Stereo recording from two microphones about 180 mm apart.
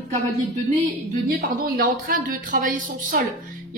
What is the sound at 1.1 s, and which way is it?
Speech, 55° right (ahead or behind).